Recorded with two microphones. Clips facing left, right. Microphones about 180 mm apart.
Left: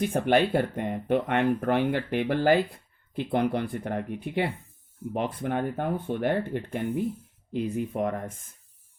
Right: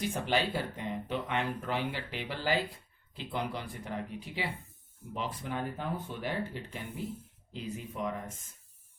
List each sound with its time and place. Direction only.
0.0 s speech: 55° left (ahead or behind)